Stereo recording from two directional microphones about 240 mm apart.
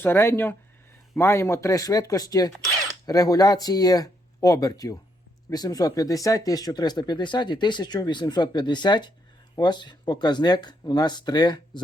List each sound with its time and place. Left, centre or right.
0.0 s speech: centre